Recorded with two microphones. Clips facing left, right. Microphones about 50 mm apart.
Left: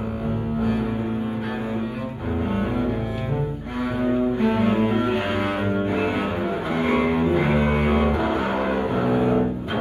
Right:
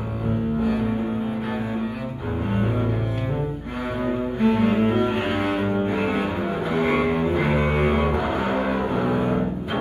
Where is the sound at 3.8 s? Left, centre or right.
Right.